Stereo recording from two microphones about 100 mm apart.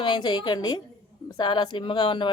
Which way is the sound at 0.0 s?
50° left (ahead or behind).